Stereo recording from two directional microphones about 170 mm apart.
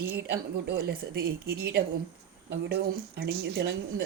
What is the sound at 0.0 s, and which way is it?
Speech, 65° right (ahead or behind).